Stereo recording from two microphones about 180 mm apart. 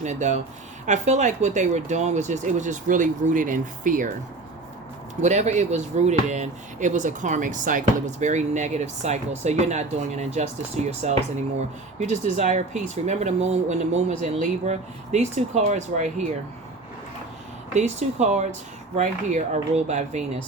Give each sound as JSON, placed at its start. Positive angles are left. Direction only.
{"t": 0.0, "sound": "speech", "side_deg": -40}
{"t": 5.2, "sound": "speech", "side_deg": -40}
{"t": 17.7, "sound": "speech", "side_deg": -40}